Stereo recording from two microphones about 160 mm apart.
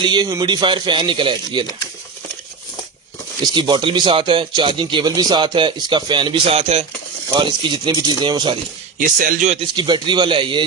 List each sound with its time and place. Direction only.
0.0 s speech: 25° right (ahead or behind)
3.4 s speech: 30° right (ahead or behind)
9.0 s a man's voice: 55° right (ahead or behind)
9.5 s a man's voice: 35° right (ahead or behind)